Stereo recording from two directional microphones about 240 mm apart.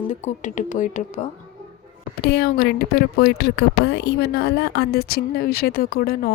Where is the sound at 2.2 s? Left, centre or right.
Left.